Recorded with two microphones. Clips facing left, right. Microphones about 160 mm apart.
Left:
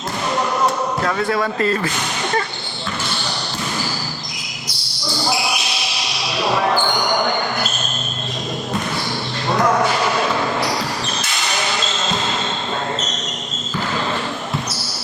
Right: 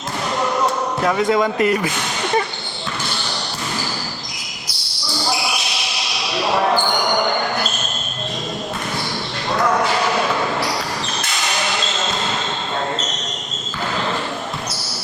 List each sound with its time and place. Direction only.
1.0 s speech: 15° right (ahead or behind)